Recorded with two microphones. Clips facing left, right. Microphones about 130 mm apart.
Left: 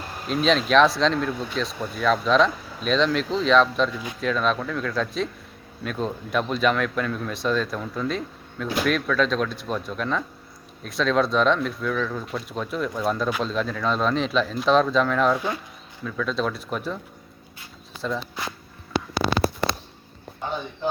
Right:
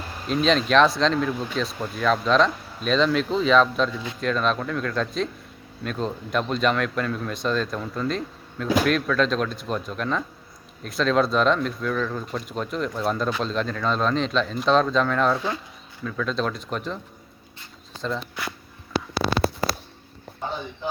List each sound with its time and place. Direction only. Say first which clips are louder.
0.3 s speech: even; centre (ahead or behind)
15.4 s speech: even; 15° left (ahead or behind)
16.0 s speech: even; centre (ahead or behind)
18.0 s speech: left 1 dB; 5° left (ahead or behind)